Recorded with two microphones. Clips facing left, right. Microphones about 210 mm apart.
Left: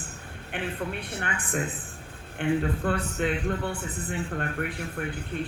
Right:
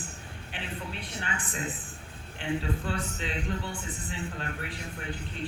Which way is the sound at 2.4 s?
55° left (ahead or behind).